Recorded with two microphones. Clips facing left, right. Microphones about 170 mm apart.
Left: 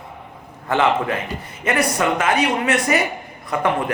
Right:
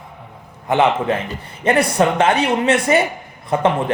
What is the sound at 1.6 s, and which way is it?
Speech, 30° right (ahead or behind).